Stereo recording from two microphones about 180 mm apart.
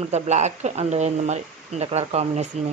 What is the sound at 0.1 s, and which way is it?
Speech, 40° right (ahead or behind).